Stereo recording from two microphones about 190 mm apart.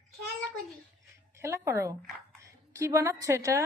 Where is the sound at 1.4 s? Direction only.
15° right (ahead or behind).